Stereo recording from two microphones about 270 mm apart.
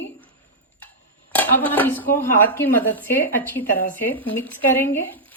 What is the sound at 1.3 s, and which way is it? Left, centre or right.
Speech, centre.